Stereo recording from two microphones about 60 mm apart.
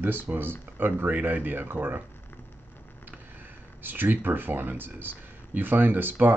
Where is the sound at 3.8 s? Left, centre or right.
Right.